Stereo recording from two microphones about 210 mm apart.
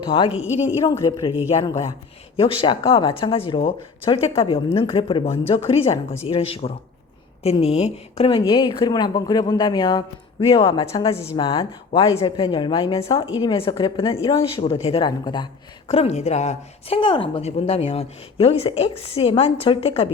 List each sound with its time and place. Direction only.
0.0 s speech: 25° left (ahead or behind)
0.3 s a woman's voice: 10° right (ahead or behind)
0.9 s speech: 20° left (ahead or behind)